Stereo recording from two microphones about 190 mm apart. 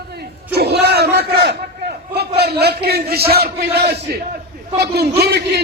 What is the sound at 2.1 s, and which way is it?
A man's voice, 60° right (ahead or behind).